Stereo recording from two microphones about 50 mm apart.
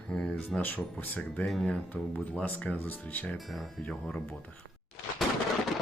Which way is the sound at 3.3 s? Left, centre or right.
Centre.